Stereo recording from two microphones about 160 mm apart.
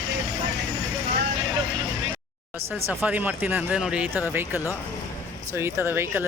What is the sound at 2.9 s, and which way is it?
Speech, 10° right (ahead or behind).